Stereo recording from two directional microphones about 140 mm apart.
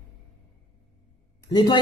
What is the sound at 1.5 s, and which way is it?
Speech, 35° left (ahead or behind).